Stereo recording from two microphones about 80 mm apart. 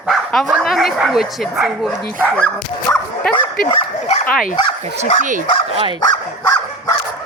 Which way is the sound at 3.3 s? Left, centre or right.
Left.